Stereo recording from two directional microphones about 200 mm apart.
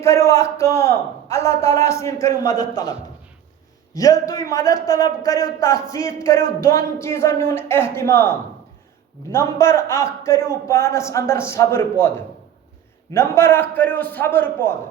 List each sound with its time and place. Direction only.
0.0 s a man's voice: 15° left (ahead or behind)
3.9 s a man's voice: 15° left (ahead or behind)
9.3 s a man's voice: 15° left (ahead or behind)